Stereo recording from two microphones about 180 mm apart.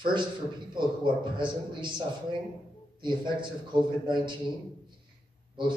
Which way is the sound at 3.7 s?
25° right (ahead or behind).